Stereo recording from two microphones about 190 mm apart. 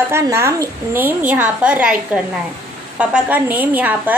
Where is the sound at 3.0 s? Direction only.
10° right (ahead or behind).